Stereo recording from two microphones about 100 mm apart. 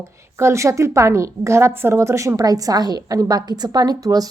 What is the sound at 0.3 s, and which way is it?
A woman's voice, 30° right (ahead or behind).